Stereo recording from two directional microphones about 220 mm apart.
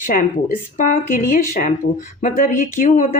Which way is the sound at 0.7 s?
35° left (ahead or behind).